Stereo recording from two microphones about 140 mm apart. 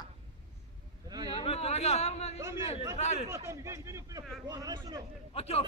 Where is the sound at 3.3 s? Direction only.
20° right (ahead or behind).